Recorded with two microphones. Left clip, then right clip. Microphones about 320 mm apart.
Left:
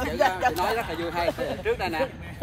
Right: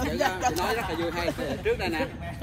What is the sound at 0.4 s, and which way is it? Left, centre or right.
Speech, centre.